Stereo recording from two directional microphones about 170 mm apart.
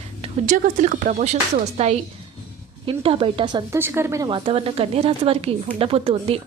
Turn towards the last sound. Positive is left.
turn(degrees=-35)  # may be behind; listen again after turning